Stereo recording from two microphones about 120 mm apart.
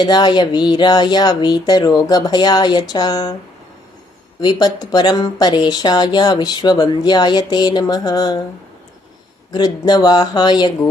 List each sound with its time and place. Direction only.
0.0 s speech: 35° left (ahead or behind)
4.4 s speech: 35° left (ahead or behind)
9.5 s speech: 35° left (ahead or behind)